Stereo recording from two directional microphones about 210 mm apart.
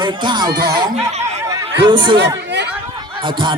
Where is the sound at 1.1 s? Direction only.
30° right (ahead or behind).